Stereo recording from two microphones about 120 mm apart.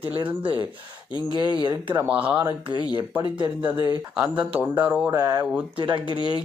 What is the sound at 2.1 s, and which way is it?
Speech, 10° right (ahead or behind).